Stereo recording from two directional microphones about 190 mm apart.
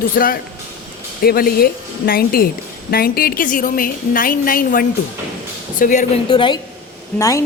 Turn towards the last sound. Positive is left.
turn(degrees=15)  # may be behind; listen again after turning